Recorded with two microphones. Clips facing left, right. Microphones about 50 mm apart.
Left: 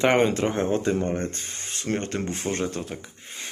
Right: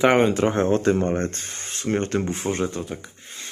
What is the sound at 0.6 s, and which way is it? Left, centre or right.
Speech, right.